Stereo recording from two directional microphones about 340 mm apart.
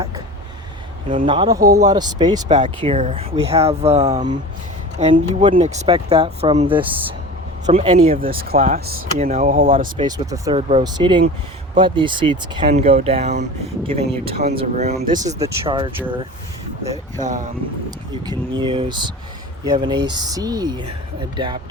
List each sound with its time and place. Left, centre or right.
1.0 s speech: centre
10.1 s speech: centre
18.6 s speech: centre